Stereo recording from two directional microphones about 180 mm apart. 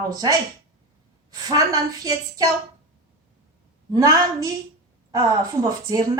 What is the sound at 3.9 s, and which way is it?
A woman's voice, 20° right (ahead or behind).